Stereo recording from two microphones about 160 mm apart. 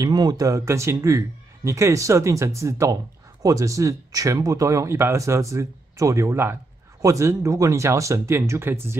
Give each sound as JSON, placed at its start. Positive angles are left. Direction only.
{"t": 0.0, "sound": "speech", "side_deg": -25}